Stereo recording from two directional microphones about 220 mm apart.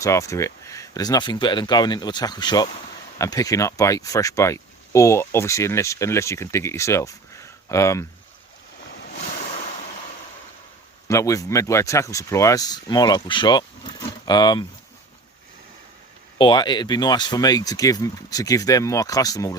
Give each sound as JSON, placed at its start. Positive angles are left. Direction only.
{"t": 0.0, "sound": "speech", "side_deg": 15}
{"t": 11.1, "sound": "speech", "side_deg": 15}
{"t": 16.4, "sound": "speech", "side_deg": 20}